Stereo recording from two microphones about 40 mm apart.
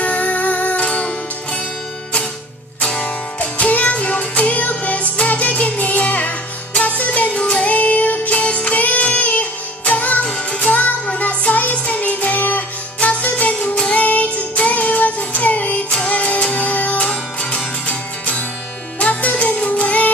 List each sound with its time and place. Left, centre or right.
0.0 s music: left
3.0 s music: left
10.2 s music: left
13.7 s music: left
14.0 s music: left
17.1 s music: left